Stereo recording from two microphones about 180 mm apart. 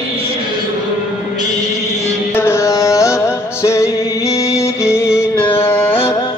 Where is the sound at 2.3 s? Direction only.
15° left (ahead or behind).